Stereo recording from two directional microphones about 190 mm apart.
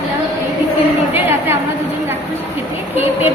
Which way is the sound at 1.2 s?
10° right (ahead or behind).